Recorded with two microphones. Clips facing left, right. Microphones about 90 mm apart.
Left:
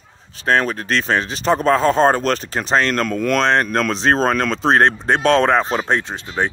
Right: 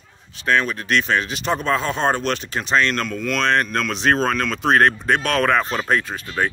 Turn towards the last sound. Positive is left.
turn(degrees=25)  # may be behind; listen again after turning